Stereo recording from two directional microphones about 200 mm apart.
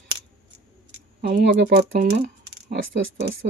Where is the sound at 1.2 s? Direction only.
55° right (ahead or behind).